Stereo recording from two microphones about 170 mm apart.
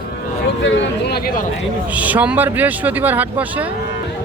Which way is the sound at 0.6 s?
80° left.